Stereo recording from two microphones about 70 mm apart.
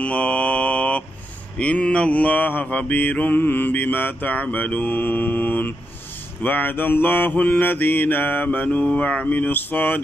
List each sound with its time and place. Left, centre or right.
0.0 s mantra: centre